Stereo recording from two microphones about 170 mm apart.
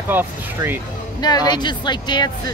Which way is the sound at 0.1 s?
10° right (ahead or behind).